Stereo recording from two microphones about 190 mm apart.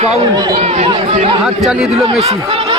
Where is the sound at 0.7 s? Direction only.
30° right (ahead or behind).